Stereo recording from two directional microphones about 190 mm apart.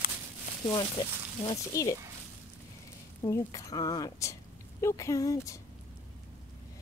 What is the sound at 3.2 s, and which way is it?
Speech, 15° left (ahead or behind).